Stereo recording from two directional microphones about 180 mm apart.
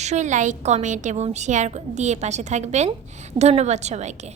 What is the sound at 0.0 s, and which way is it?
A woman's voice, 40° right (ahead or behind).